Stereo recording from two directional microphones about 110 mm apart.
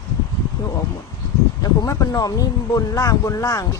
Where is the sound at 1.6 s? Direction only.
35° left (ahead or behind).